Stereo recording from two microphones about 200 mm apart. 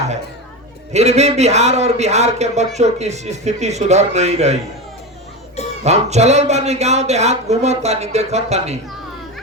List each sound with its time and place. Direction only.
0.9 s speech: 35° right (ahead or behind)
5.8 s speech: 35° right (ahead or behind)